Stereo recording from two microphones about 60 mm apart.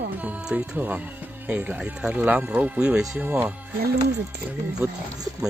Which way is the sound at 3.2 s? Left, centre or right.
Right.